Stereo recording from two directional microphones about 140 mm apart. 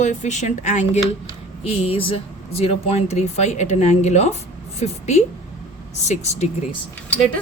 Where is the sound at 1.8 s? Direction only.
40° left (ahead or behind).